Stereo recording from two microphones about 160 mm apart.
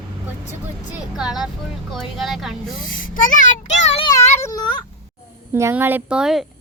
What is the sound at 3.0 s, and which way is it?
A child's voice, 55° left (ahead or behind).